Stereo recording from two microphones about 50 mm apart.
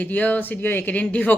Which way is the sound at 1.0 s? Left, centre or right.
Left.